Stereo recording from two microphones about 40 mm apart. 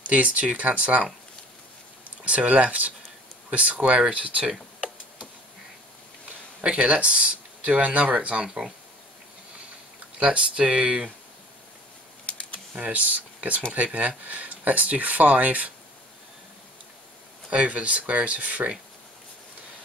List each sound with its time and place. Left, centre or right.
0.0 s speech: right
2.2 s speech: right
6.6 s speech: right
10.1 s speech: right
12.3 s a sound: left
12.7 s speech: right
17.5 s speech: right